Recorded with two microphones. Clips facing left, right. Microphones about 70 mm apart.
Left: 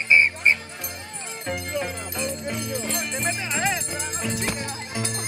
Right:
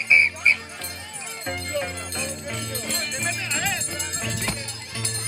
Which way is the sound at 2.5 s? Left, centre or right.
Centre.